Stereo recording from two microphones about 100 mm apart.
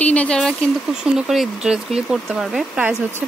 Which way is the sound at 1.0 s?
5° right (ahead or behind).